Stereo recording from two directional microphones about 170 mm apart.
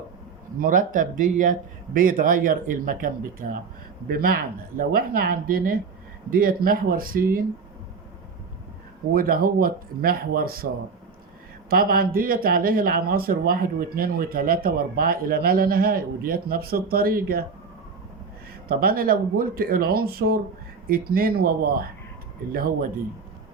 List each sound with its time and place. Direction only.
0.6 s a man's voice: 55° right (ahead or behind)
9.1 s speech: 60° right (ahead or behind)
11.7 s speech: 60° right (ahead or behind)
18.7 s speech: 60° right (ahead or behind)